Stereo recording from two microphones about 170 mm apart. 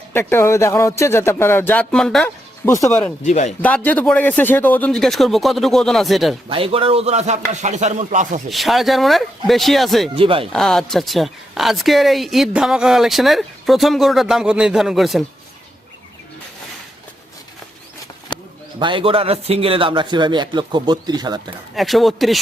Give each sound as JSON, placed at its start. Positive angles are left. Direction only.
{"t": 0.1, "sound": "speech", "side_deg": 15}
{"t": 2.6, "sound": "speech", "side_deg": 15}
{"t": 3.2, "sound": "speech", "side_deg": 45}
{"t": 3.6, "sound": "a woman's voice", "side_deg": 10}
{"t": 6.5, "sound": "speech", "side_deg": -35}
{"t": 8.4, "sound": "a woman's voice", "side_deg": 0}
{"t": 10.2, "sound": "speech", "side_deg": -30}
{"t": 10.5, "sound": "a woman's voice", "side_deg": 5}
{"t": 18.3, "sound": "a sound", "side_deg": 25}
{"t": 18.8, "sound": "a man's voice", "side_deg": -30}
{"t": 21.8, "sound": "a woman's voice", "side_deg": 0}